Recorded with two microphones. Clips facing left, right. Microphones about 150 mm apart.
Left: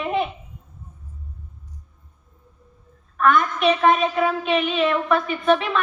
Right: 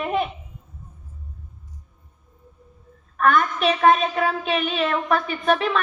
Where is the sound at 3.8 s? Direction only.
40° right (ahead or behind).